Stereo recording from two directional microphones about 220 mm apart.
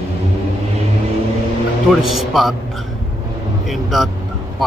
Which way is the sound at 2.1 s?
Centre (ahead or behind).